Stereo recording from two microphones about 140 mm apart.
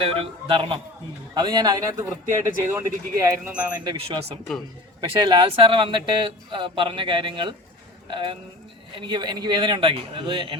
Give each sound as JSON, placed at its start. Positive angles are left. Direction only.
{"t": 0.0, "sound": "speech", "side_deg": -40}
{"t": 1.3, "sound": "speech", "side_deg": -30}
{"t": 3.9, "sound": "speech", "side_deg": -45}
{"t": 4.9, "sound": "speech", "side_deg": -35}